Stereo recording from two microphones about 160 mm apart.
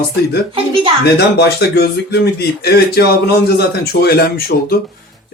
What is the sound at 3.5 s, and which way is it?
Speech, 80° left.